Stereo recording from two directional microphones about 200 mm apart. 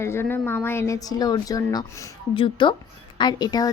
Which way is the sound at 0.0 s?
10° left (ahead or behind).